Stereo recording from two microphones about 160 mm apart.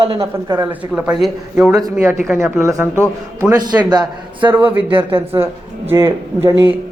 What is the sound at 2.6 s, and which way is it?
A man's voice, 15° right (ahead or behind).